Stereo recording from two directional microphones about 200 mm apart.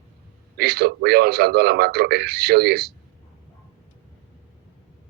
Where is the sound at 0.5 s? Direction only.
50° right (ahead or behind).